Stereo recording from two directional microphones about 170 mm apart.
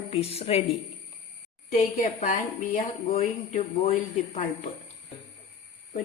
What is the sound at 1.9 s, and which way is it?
A woman's voice, 45° left (ahead or behind).